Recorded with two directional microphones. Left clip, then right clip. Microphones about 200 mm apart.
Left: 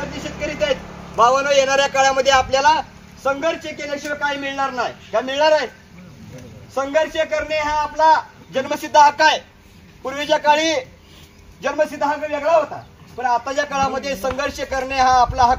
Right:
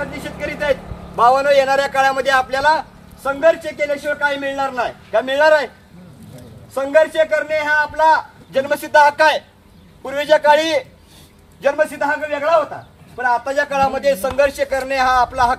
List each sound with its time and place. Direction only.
0.8 s a sound: 45° right (ahead or behind)
1.1 s a man's voice: 25° left (ahead or behind)
3.3 s a man's voice: 5° left (ahead or behind)
6.7 s a man's voice: centre (ahead or behind)